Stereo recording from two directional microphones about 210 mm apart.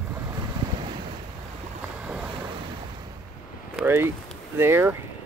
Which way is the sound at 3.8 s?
10° right (ahead or behind).